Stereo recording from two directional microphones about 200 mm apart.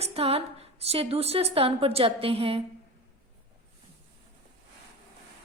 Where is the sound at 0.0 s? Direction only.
30° right (ahead or behind).